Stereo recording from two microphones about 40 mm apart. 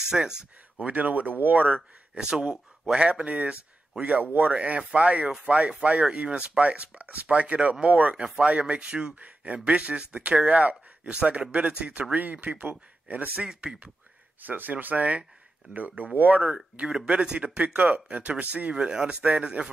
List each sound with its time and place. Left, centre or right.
0.0 s speech: centre
0.8 s speech: right
2.1 s speech: centre
2.9 s speech: right
4.5 s speech: right
14.4 s speech: right
16.9 s speech: right
17.7 s speech: right
18.7 s speech: right